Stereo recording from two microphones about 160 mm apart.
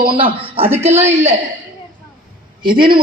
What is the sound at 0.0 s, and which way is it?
A man's voice, 35° right (ahead or behind).